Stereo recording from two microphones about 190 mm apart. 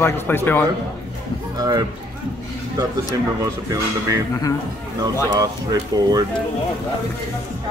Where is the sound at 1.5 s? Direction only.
20° right (ahead or behind).